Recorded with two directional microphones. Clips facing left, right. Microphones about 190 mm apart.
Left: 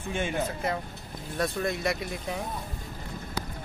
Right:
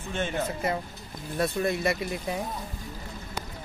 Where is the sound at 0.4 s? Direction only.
Centre (ahead or behind).